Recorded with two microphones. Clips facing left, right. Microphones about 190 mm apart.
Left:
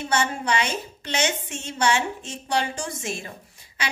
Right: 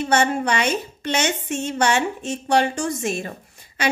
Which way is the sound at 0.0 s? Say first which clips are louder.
Right 6 dB; 55° right (ahead or behind).